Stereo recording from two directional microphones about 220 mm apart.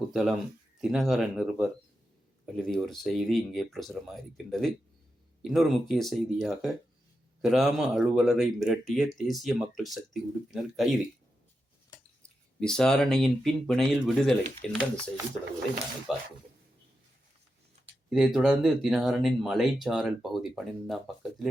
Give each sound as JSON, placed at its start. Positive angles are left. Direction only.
{"t": 0.1, "sound": "speech", "side_deg": 0}
{"t": 12.2, "sound": "speech", "side_deg": 5}
{"t": 16.1, "sound": "speech", "side_deg": 0}
{"t": 17.8, "sound": "tick-tock", "side_deg": -30}
{"t": 18.1, "sound": "speech", "side_deg": 0}